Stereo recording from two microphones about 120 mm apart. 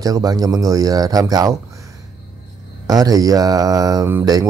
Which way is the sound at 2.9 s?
30° right (ahead or behind).